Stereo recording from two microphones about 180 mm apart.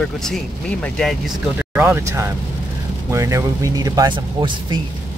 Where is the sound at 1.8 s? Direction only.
15° right (ahead or behind).